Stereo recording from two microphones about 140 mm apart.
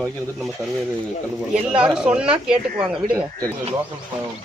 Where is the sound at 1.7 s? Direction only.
5° right (ahead or behind).